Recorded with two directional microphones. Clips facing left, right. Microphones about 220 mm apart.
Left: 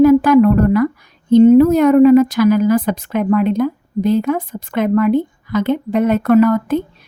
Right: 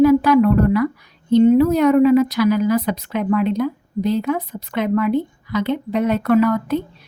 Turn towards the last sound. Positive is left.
turn(degrees=50)  # may be behind; listen again after turning